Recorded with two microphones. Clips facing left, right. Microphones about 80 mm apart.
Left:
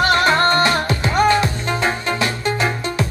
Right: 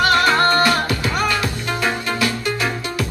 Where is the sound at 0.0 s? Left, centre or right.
Left.